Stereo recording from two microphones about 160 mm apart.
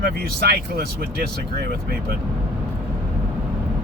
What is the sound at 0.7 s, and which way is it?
Speech, 75° right (ahead or behind).